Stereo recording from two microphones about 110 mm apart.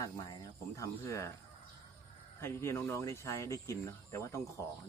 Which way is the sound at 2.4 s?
25° left (ahead or behind).